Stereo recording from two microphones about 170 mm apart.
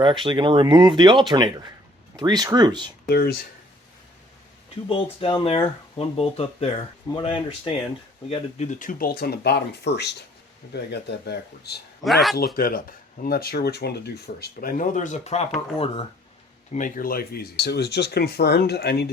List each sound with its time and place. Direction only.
0.0 s speech: 30° right (ahead or behind)
3.1 s speech: 70° left (ahead or behind)
4.9 s speech: 30° left (ahead or behind)
8.3 s speech: 45° left (ahead or behind); by 11.8 s 75° left (ahead or behind)
12.0 s speech: centre (ahead or behind)
12.5 s speech: 60° left (ahead or behind); by 15.4 s 40° left (ahead or behind)
16.7 s speech: 50° left (ahead or behind); by 19.1 s 70° left (ahead or behind)